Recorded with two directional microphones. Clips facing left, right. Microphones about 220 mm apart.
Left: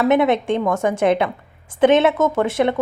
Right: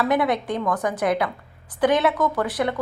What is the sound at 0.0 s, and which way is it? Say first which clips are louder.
A woman's voice: left 5 dB; 25° left (ahead or behind).